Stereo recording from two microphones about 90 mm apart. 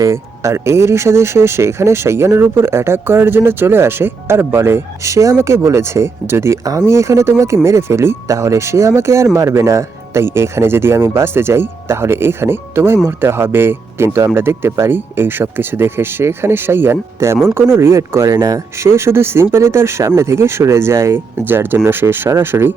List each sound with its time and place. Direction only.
0.0 s speech: 35° right (ahead or behind)
18.3 s speech: 45° right (ahead or behind)
18.8 s speech: 30° right (ahead or behind)